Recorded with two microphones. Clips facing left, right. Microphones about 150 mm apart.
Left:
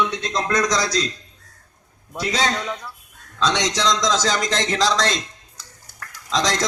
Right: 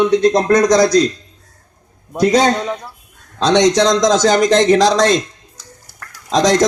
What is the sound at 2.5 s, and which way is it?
Speech, 35° right (ahead or behind).